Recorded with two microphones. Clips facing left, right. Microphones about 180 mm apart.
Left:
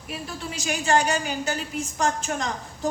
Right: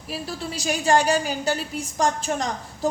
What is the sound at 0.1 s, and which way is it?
A woman's voice, 35° right (ahead or behind).